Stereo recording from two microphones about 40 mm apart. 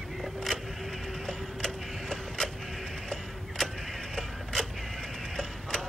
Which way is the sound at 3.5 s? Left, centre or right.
Centre.